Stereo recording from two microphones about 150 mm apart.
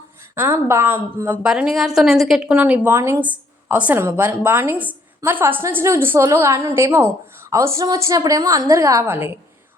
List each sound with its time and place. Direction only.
0.3 s a woman's voice: 15° right (ahead or behind)